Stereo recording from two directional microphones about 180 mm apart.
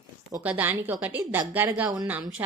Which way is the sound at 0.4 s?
10° right (ahead or behind).